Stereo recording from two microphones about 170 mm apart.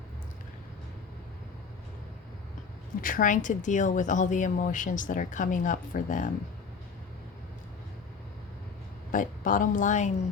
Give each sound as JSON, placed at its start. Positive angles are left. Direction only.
{"t": 3.0, "sound": "speech", "side_deg": 55}
{"t": 9.1, "sound": "speech", "side_deg": 50}